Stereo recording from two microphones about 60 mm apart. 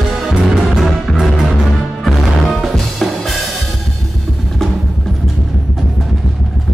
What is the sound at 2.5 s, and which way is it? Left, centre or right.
Drum, centre.